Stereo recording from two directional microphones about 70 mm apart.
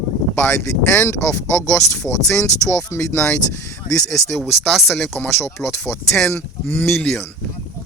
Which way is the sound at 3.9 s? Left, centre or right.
Left.